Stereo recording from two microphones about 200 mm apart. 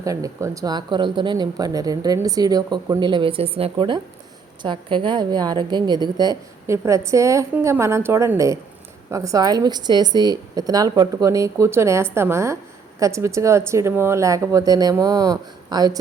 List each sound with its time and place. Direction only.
0.0 s a woman's voice: 15° right (ahead or behind)